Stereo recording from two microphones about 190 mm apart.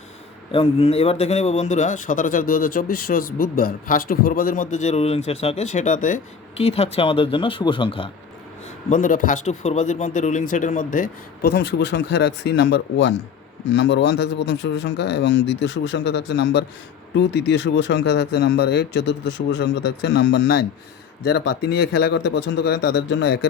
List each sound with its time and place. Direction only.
0.5 s speech: 30° left (ahead or behind)
8.9 s speech: 45° left (ahead or behind); by 23.5 s 65° left (ahead or behind)